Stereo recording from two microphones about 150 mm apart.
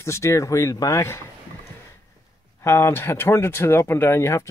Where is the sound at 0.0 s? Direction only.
20° left (ahead or behind).